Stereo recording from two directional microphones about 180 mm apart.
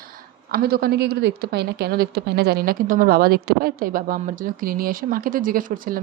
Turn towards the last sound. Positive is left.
turn(degrees=-50)  # may be behind; listen again after turning